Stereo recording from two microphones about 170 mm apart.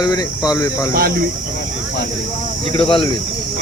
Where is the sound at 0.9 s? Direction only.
60° right (ahead or behind).